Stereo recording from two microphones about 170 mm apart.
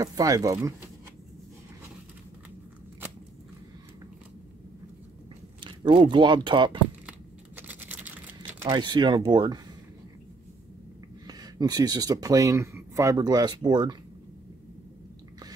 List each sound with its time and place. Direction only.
0.0 s speech: 20° right (ahead or behind)
5.6 s speech: 30° right (ahead or behind)
7.1 s a sound: 10° right (ahead or behind)
8.5 s speech: 25° right (ahead or behind)
11.2 s speech: 25° right (ahead or behind)